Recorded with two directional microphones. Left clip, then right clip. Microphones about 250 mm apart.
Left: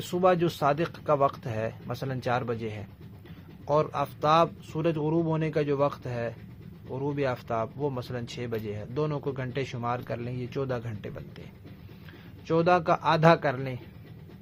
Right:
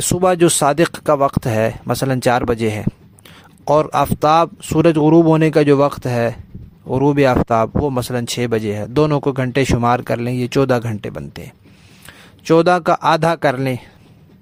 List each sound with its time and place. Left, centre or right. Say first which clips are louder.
0.1 s speech: right 10 dB; right